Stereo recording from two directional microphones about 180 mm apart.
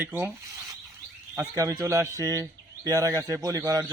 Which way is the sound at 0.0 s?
10° right (ahead or behind).